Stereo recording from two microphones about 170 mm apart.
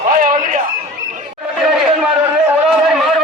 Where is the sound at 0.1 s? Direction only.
55° right (ahead or behind).